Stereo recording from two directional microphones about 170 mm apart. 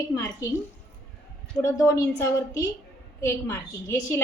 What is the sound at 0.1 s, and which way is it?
Speech, 20° left (ahead or behind).